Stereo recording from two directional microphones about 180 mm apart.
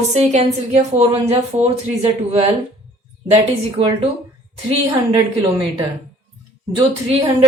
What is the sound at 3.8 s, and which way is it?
Speech, 35° right (ahead or behind).